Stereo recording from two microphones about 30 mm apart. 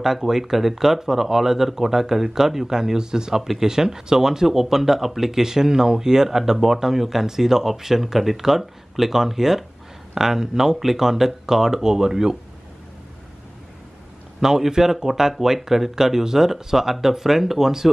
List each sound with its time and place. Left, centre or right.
0.0 s speech: centre
2.7 s speech: right
14.4 s speech: centre